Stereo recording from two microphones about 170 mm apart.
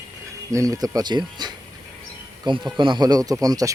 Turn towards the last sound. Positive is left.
turn(degrees=-20)  # may be behind; listen again after turning